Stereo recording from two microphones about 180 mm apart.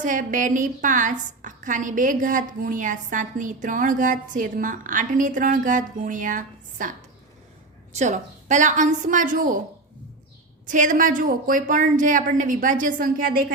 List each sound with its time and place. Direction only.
0.0 s a woman's voice: 45° right (ahead or behind)
7.9 s a woman's voice: 40° right (ahead or behind)
10.7 s a woman's voice: 45° right (ahead or behind)